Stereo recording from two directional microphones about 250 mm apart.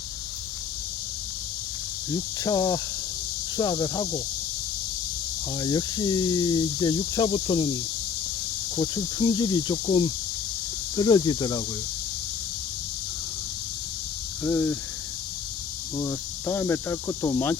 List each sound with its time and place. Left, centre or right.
2.1 s speech: centre
5.5 s speech: centre
8.7 s speech: centre
10.9 s speech: centre
14.4 s speech: centre
16.0 s speech: centre